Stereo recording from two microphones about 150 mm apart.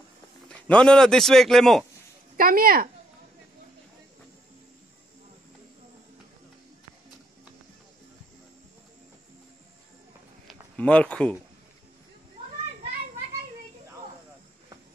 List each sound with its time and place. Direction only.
0.5 s a man's voice: 5° left (ahead or behind)
2.3 s a woman's voice: 75° right (ahead or behind)
10.4 s a sound: 10° left (ahead or behind)